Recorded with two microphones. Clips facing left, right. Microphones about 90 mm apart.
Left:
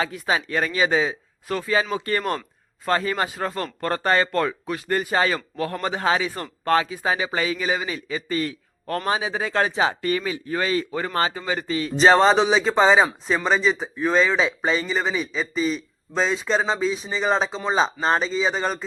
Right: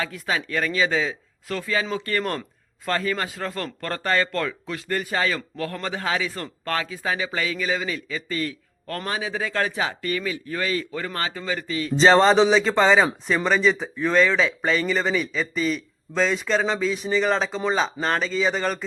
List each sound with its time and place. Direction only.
0.3 s speech: 20° left (ahead or behind)
11.9 s speech: 10° left (ahead or behind)